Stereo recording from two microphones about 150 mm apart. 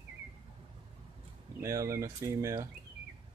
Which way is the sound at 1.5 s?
20° right (ahead or behind).